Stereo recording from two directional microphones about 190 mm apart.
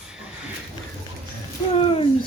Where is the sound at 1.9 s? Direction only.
25° left (ahead or behind).